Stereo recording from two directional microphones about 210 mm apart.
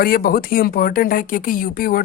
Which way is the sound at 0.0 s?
45° left (ahead or behind).